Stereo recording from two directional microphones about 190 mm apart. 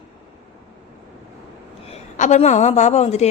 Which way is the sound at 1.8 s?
35° left (ahead or behind).